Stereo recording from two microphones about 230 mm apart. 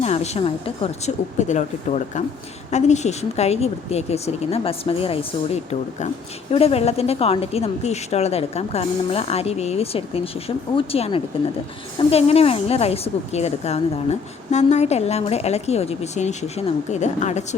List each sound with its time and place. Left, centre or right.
0.0 s a woman's voice: left